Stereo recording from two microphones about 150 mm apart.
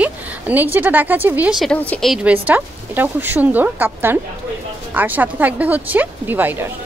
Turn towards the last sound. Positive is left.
turn(degrees=-15)  # may be behind; listen again after turning